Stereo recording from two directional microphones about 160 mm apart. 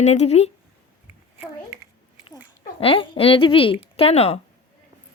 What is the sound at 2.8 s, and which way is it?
Speech, 35° left (ahead or behind).